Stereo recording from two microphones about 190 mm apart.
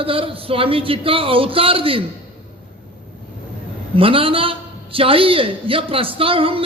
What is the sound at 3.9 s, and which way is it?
A man's voice, 30° right (ahead or behind).